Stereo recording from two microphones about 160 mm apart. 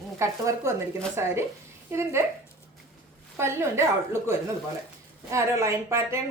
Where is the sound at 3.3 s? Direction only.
15° right (ahead or behind).